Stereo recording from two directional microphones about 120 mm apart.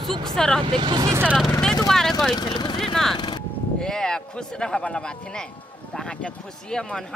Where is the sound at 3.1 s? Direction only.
40° left (ahead or behind).